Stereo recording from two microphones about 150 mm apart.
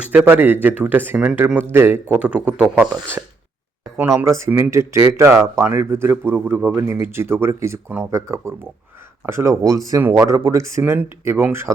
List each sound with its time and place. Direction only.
0.1 s speech: 15° right (ahead or behind)